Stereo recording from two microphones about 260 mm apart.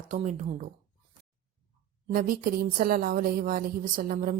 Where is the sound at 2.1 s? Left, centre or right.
Right.